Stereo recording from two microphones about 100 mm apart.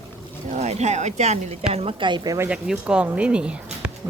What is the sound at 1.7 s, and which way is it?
Speech, 75° right (ahead or behind).